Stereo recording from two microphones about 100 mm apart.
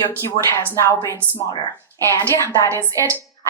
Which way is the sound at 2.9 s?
35° right (ahead or behind).